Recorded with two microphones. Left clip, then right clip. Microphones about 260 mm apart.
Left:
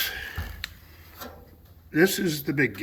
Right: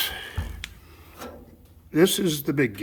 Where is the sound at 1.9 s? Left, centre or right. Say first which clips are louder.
Right 2 dB; centre.